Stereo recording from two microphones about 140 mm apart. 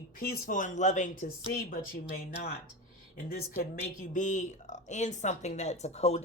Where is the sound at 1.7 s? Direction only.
75° left (ahead or behind).